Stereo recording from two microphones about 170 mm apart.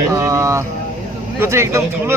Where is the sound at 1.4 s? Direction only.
15° right (ahead or behind).